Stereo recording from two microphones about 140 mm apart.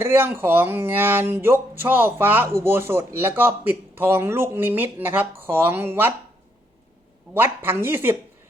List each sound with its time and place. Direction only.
0.0 s speech: 15° right (ahead or behind)
7.3 s speech: 15° right (ahead or behind)